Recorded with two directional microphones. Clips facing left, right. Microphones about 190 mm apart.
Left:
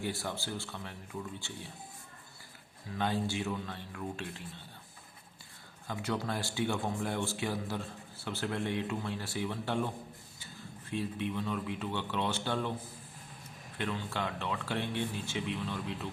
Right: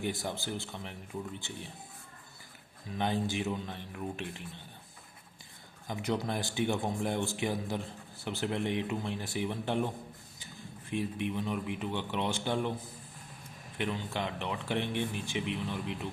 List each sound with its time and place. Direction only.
0.0 s speech: 15° right (ahead or behind)
2.9 s speech: 20° right (ahead or behind)
5.9 s speech: 15° right (ahead or behind)
13.7 s speech: 15° right (ahead or behind)